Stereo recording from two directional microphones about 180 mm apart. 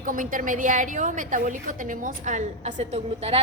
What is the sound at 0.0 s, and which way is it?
A woman's voice, 50° right (ahead or behind).